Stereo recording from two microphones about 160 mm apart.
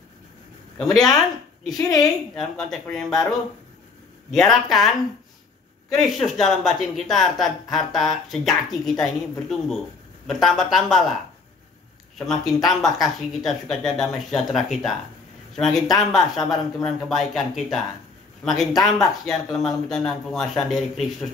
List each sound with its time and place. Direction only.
0.7 s speech: centre (ahead or behind)
1.8 s a woman's voice: 25° left (ahead or behind)
2.3 s speech: centre (ahead or behind)
13.3 s speech: centre (ahead or behind)